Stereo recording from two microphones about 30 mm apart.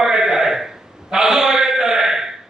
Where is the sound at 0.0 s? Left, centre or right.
Centre.